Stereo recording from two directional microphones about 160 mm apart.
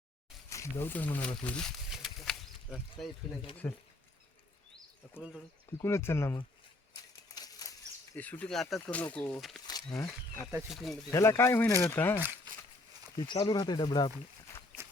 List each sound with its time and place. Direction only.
0.5 s speech: 15° left (ahead or behind)
1.5 s a sound: 5° left (ahead or behind)
3.6 s speech: 20° left (ahead or behind)
5.8 s speech: 15° left (ahead or behind)
7.3 s a sound: 25° left (ahead or behind)
8.1 s speech: 10° left (ahead or behind)
9.6 s wild animals: 20° left (ahead or behind)
10.7 s speech: centre (ahead or behind)
11.1 s speech: 15° left (ahead or behind)
13.1 s speech: 25° left (ahead or behind)